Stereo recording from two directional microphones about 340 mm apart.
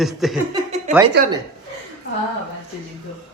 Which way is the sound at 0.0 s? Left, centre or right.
Centre.